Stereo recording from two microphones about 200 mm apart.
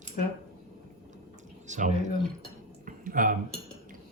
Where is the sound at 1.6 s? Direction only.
35° right (ahead or behind).